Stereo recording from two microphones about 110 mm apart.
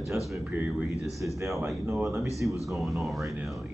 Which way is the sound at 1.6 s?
25° right (ahead or behind).